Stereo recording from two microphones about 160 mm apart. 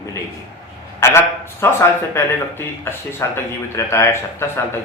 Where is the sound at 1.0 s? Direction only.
15° left (ahead or behind).